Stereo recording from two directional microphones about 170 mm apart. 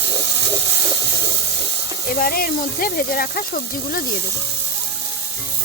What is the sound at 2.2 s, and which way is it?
Speech, 60° left (ahead or behind).